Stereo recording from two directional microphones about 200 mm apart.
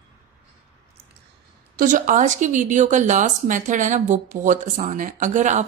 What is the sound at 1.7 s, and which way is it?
A woman's voice, 40° right (ahead or behind).